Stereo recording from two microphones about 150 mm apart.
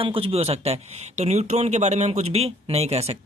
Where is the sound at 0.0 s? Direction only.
40° right (ahead or behind).